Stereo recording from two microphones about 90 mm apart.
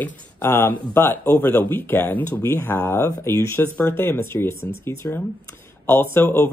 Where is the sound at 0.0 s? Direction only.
25° left (ahead or behind).